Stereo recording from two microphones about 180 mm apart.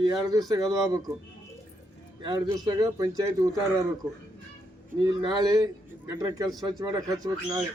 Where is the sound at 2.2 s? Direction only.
20° right (ahead or behind).